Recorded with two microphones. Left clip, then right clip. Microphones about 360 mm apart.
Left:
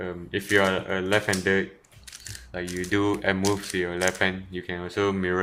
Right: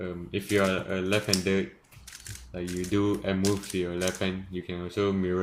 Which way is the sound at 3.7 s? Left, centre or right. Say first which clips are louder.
Left 4 dB; left.